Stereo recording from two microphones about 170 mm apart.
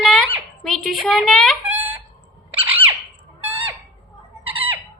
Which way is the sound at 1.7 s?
10° right (ahead or behind).